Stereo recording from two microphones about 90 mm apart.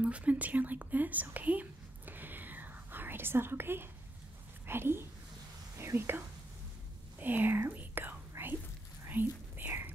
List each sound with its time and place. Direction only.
0.0 s whispering: 15° right (ahead or behind)
4.6 s speech: 25° right (ahead or behind)
7.2 s whispering: 20° right (ahead or behind)